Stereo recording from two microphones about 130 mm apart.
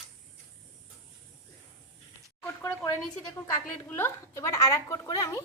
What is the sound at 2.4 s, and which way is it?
Speech, 20° left (ahead or behind).